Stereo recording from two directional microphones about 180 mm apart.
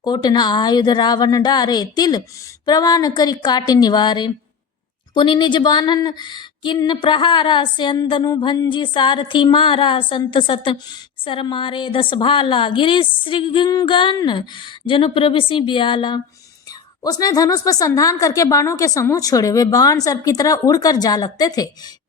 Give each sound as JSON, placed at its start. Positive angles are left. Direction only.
{"t": 0.0, "sound": "speech", "side_deg": 25}